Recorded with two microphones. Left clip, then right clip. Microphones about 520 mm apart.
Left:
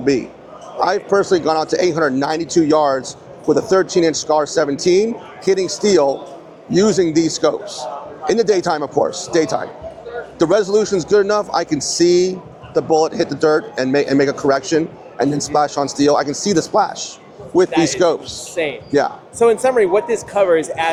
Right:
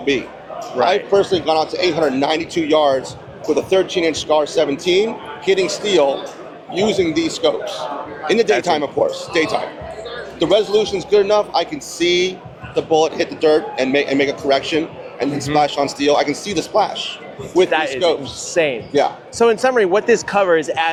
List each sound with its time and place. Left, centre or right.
0.8 s a man's voice: left
2.1 s a man's voice: left
10.3 s a man's voice: left
18.0 s a man's voice: left
18.5 s speech: right